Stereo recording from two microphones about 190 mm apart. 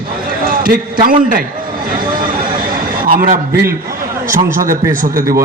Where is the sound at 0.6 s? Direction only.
50° right (ahead or behind).